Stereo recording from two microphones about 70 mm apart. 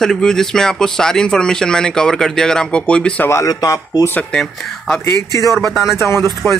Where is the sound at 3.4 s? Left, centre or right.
Left.